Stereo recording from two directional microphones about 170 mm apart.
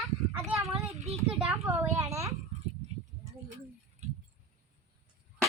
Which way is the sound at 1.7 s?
20° right (ahead or behind).